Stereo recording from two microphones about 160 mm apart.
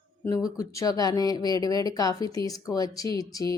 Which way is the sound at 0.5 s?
20° left (ahead or behind).